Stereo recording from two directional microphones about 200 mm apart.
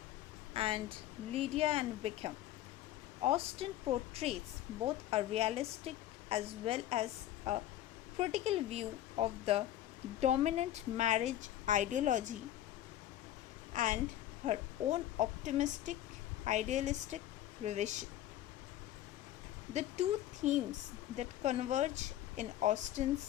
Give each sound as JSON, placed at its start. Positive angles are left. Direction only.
{"t": 0.5, "sound": "a woman's voice", "side_deg": -30}
{"t": 13.7, "sound": "a woman's voice", "side_deg": -40}
{"t": 19.7, "sound": "a woman's voice", "side_deg": -35}